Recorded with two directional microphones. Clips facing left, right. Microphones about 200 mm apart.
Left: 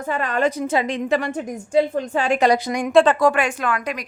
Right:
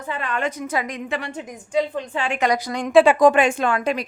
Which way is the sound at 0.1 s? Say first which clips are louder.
Left 5 dB; 40° left (ahead or behind).